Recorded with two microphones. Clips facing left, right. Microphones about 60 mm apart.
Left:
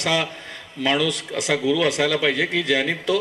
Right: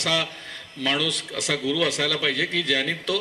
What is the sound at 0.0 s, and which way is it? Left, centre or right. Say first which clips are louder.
Speech: left 3 dB; centre.